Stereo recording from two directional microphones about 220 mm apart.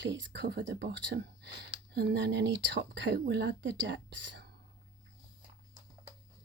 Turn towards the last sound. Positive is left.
turn(degrees=-55)  # may be behind; listen again after turning